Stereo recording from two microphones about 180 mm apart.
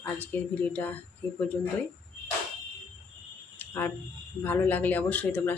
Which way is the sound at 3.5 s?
15° left (ahead or behind).